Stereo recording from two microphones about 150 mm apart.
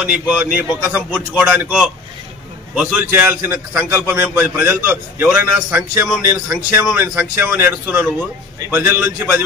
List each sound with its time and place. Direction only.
0.0 s a man's voice: 10° right (ahead or behind)